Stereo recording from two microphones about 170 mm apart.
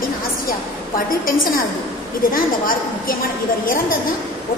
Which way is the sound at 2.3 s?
55° left (ahead or behind).